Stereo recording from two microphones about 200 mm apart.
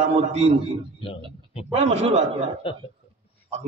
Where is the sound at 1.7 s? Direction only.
30° right (ahead or behind).